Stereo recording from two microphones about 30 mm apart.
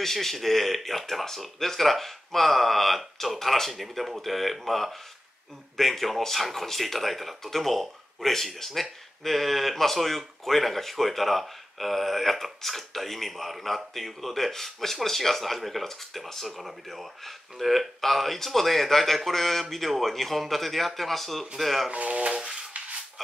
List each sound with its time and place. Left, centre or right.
0.0 s speech: centre
3.7 s speech: centre
16.5 s speech: centre
21.9 s speech: right